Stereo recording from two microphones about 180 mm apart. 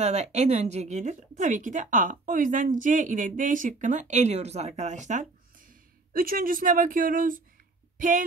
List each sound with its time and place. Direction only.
0.0 s speech: 40° right (ahead or behind)